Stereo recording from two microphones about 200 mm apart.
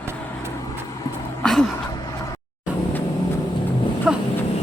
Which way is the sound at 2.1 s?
15° left (ahead or behind).